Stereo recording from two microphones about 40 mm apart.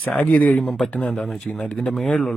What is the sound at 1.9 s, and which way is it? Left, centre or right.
Speech, centre.